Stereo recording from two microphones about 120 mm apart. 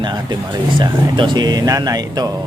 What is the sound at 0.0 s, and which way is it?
Speech, 35° right (ahead or behind).